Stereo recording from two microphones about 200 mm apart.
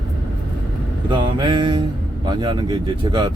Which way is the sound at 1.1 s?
25° right (ahead or behind).